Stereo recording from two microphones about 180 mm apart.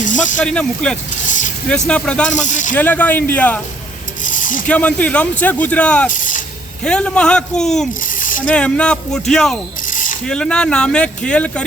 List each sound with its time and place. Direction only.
0.0 s snake: 45° left (ahead or behind)
0.3 s speech: 5° left (ahead or behind)
2.3 s speech: 45° left (ahead or behind)
2.7 s a man's voice: 10° left (ahead or behind)
4.2 s pulleys: 45° left (ahead or behind)
4.6 s a man's voice: 5° left (ahead or behind)
6.1 s vehicle: 45° left (ahead or behind)
6.8 s speech: 5° left (ahead or behind)
8.0 s a sound: 50° left (ahead or behind)
8.4 s speech: 5° left (ahead or behind)
9.8 s mechanisms: 45° left (ahead or behind)
10.2 s speech: 5° left (ahead or behind)